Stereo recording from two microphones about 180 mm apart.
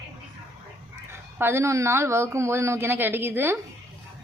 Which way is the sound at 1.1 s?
15° right (ahead or behind).